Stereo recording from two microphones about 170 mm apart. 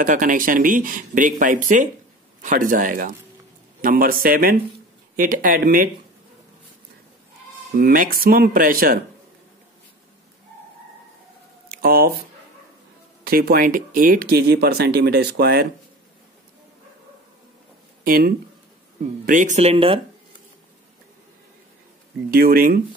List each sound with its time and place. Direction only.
0.0 s speech: 50° right (ahead or behind)
7.7 s speech: 60° right (ahead or behind)
11.7 s speech: 60° right (ahead or behind)
13.2 s speech: 60° right (ahead or behind)
18.0 s speech: 55° right (ahead or behind); by 20.0 s 35° right (ahead or behind)
22.3 s speech: 60° right (ahead or behind)